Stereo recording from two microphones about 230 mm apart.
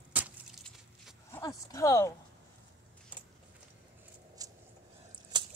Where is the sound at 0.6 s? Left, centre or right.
Centre.